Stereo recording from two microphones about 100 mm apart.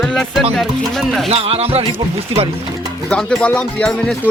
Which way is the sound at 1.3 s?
85° right.